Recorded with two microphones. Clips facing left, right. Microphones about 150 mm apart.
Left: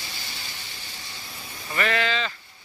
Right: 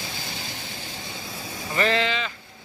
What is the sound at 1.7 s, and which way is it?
Sheep, 25° right (ahead or behind).